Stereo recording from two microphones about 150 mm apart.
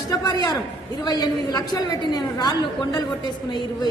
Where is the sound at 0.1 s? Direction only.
25° left (ahead or behind).